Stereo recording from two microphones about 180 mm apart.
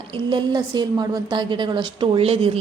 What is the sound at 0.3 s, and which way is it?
A woman's voice, 25° right (ahead or behind).